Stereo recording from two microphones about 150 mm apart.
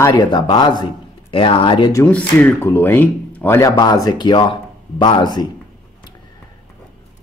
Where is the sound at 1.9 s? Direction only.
20° left (ahead or behind).